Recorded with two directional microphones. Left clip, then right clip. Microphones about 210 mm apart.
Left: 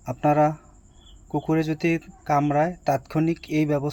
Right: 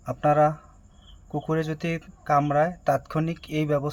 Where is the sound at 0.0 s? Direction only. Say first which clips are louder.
Even; 10° left (ahead or behind).